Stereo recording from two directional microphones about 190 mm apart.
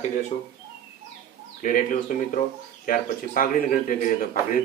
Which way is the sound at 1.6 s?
45° left (ahead or behind).